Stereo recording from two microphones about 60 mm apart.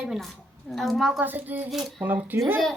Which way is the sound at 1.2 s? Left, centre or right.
Right.